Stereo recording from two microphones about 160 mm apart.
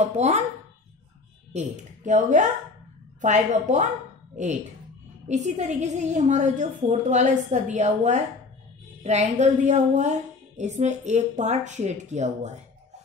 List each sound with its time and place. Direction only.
0.0 s a woman's voice: 45° right (ahead or behind)
1.5 s a woman's voice: 45° right (ahead or behind)
5.3 s a woman's voice: 45° right (ahead or behind)